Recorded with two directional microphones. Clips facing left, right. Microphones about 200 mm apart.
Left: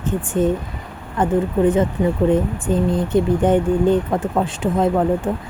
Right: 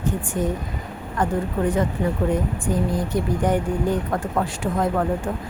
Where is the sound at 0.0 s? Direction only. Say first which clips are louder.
Left 5 dB; 25° left (ahead or behind).